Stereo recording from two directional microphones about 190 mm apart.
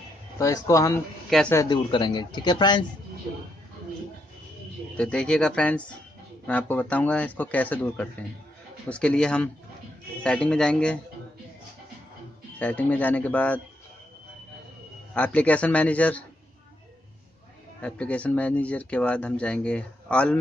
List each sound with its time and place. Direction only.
0.4 s speech: 15° left (ahead or behind)
4.9 s speech: 5° left (ahead or behind)
12.5 s speech: 10° left (ahead or behind)
15.1 s speech: 5° left (ahead or behind)
17.7 s speech: 5° left (ahead or behind)